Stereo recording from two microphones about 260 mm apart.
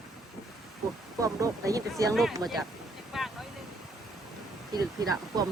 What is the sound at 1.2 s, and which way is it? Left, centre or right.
Speech, centre.